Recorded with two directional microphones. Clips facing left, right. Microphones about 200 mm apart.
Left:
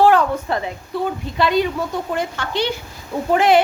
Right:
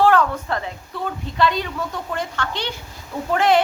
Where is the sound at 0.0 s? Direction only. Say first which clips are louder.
Left 2 dB; 15° left (ahead or behind).